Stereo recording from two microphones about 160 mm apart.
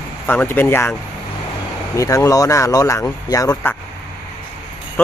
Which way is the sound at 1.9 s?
20° left (ahead or behind).